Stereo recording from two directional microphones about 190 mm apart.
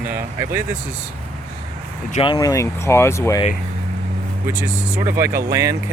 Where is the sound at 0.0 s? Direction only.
10° right (ahead or behind).